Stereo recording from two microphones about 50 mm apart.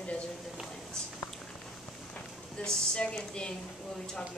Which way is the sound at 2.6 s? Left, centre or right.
Centre.